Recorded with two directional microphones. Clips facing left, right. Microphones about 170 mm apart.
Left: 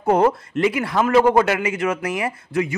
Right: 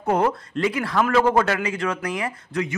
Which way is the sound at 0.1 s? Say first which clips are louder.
Left 4 dB; 25° left (ahead or behind).